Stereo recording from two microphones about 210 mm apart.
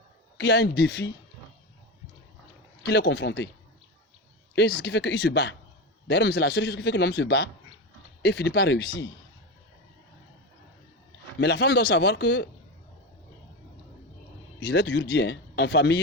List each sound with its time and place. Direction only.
0.3 s speech: 55° left (ahead or behind)
2.8 s a man's voice: 55° left (ahead or behind)
4.8 s a man's voice: 55° left (ahead or behind)
11.3 s a man's voice: 55° left (ahead or behind)
14.6 s a man's voice: 55° left (ahead or behind)